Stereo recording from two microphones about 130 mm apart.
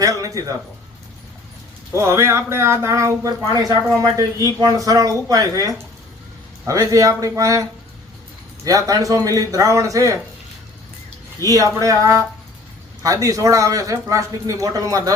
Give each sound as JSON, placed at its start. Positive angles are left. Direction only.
{"t": 0.0, "sound": "a sound", "side_deg": -25}
{"t": 1.9, "sound": "speech", "side_deg": -20}
{"t": 11.4, "sound": "speech", "side_deg": -25}
{"t": 13.2, "sound": "speech", "side_deg": -25}